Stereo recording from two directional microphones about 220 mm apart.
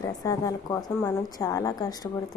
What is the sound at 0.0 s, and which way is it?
A woman's voice, 15° left (ahead or behind).